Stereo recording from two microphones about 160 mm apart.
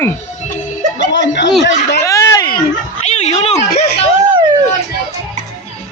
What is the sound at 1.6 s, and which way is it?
Speech, 90° left.